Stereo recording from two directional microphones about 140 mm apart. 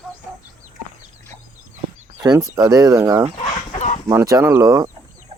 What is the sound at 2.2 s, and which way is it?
Speech, 25° right (ahead or behind).